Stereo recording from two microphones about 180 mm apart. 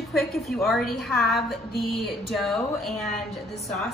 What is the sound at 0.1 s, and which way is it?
Speech, centre (ahead or behind).